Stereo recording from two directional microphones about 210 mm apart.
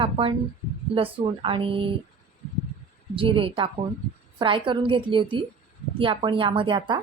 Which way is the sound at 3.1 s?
25° right (ahead or behind).